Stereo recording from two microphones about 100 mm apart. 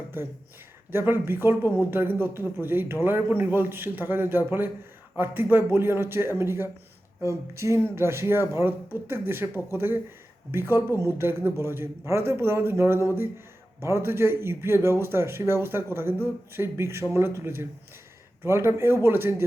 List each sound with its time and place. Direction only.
0.2 s speech: 20° right (ahead or behind)